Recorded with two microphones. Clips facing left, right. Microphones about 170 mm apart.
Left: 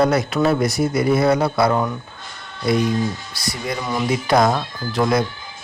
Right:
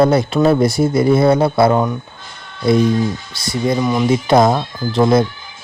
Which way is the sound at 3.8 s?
15° right (ahead or behind).